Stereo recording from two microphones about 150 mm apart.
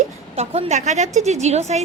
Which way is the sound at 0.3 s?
45° right (ahead or behind).